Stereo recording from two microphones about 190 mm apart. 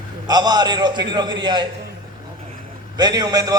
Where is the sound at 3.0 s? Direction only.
20° right (ahead or behind).